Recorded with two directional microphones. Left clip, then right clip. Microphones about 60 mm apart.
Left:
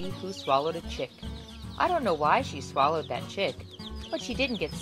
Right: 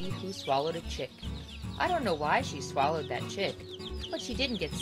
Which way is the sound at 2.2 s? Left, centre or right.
Left.